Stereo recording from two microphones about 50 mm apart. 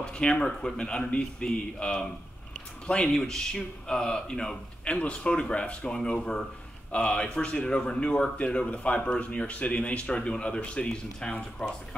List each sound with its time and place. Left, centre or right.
0.0 s a man's voice: centre
3.1 s a man's voice: centre
4.8 s speech: left